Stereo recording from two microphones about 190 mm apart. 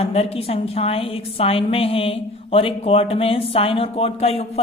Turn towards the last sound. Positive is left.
turn(degrees=30)  # may be behind; listen again after turning